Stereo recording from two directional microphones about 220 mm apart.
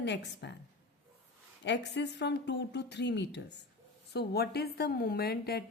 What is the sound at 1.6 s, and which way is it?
A woman's voice, 50° left (ahead or behind).